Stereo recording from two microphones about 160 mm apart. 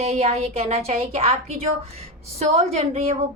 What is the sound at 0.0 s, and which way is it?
A woman's voice, 40° right (ahead or behind).